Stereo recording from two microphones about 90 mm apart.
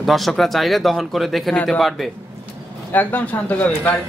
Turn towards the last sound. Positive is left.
turn(degrees=20)  # may be behind; listen again after turning